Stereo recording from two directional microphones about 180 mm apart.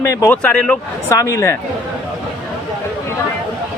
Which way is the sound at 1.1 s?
20° left (ahead or behind).